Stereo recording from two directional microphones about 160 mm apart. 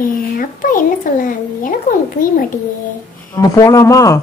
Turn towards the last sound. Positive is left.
turn(degrees=20)  # may be behind; listen again after turning